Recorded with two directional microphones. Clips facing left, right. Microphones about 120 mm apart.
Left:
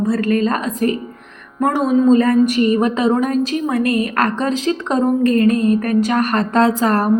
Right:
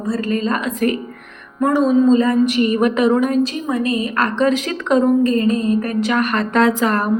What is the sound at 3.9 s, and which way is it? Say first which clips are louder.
Speech: even; 45° left (ahead or behind).